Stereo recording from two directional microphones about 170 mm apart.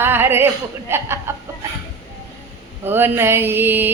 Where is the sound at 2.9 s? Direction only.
10° right (ahead or behind).